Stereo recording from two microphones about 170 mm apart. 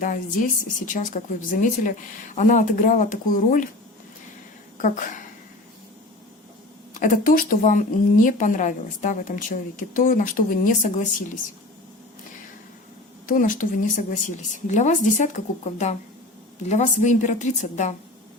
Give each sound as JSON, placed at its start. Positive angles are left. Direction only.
{"t": 0.9, "sound": "a woman's voice", "side_deg": 50}
{"t": 4.8, "sound": "a woman's voice", "side_deg": 50}
{"t": 6.9, "sound": "a woman's voice", "side_deg": 50}
{"t": 13.2, "sound": "a woman's voice", "side_deg": 50}